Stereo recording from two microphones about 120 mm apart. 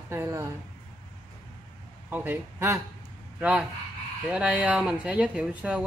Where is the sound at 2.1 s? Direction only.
15° right (ahead or behind).